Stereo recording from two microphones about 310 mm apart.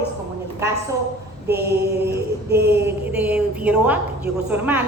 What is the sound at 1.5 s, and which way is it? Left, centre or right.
Mantra, right.